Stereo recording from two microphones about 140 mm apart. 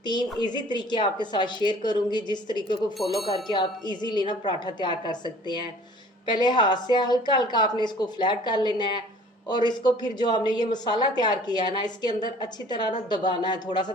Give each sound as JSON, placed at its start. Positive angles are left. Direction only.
{"t": 0.0, "sound": "a woman's voice", "side_deg": 30}
{"t": 3.0, "sound": "speech", "side_deg": 0}
{"t": 3.4, "sound": "a woman's voice", "side_deg": 30}